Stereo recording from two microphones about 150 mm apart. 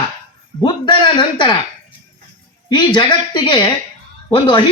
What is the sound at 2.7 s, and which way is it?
Speech, 30° left (ahead or behind).